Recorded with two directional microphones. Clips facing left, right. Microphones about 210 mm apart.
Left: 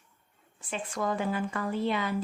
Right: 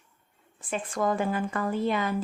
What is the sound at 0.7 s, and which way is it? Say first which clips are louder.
A woman's voice: right 4 dB; 50° right (ahead or behind).